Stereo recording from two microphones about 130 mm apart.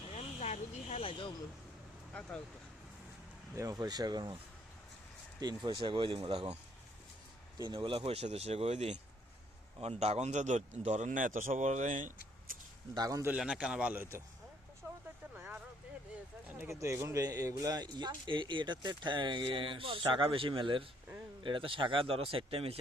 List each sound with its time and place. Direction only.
0.1 s a sound: 60° left (ahead or behind)
3.5 s speech: 25° right (ahead or behind)
5.4 s speech: 30° right (ahead or behind)
7.6 s speech: 40° right (ahead or behind); by 9.0 s 55° right (ahead or behind)
10.0 s speech: 55° right (ahead or behind); by 12.1 s 75° right (ahead or behind)
12.9 s a man's voice: 30° right (ahead or behind)
13.3 s a man's voice: 5° right (ahead or behind)
15.4 s vehicle: 15° right (ahead or behind)
16.5 s speech: 20° right (ahead or behind); by 22.8 s 45° right (ahead or behind)